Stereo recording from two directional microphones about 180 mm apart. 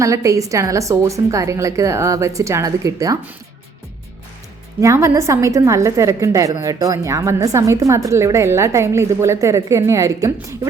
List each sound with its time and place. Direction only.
0.0 s a woman's voice: 15° right (ahead or behind)
4.8 s a woman's voice: 15° right (ahead or behind)